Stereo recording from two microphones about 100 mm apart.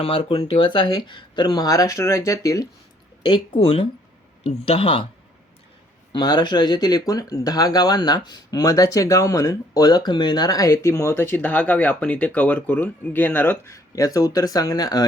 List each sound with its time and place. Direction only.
0.0 s speech: 70° left (ahead or behind); by 2.6 s 35° left (ahead or behind)
3.2 s speech: 60° left (ahead or behind)
6.1 s speech: 45° left (ahead or behind); by 13.6 s 15° left (ahead or behind)
13.7 s speech: 35° left (ahead or behind)